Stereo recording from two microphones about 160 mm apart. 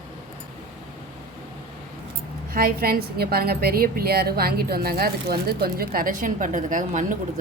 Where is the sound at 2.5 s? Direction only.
70° right (ahead or behind); by 7.2 s 55° right (ahead or behind).